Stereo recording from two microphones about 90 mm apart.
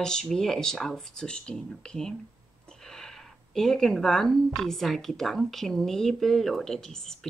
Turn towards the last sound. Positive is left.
turn(degrees=5)  # may be behind; listen again after turning